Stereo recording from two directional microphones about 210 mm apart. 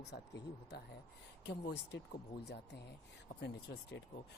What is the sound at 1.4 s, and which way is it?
Speech, 55° left (ahead or behind).